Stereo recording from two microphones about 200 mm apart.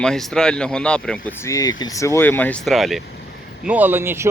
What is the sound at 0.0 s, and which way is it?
Speech, 5° left (ahead or behind).